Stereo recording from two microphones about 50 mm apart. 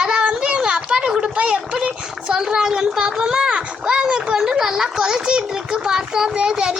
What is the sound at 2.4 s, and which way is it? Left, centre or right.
A child's voice, centre.